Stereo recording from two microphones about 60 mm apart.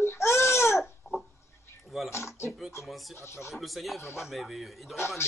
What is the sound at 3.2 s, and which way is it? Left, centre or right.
Speech, left.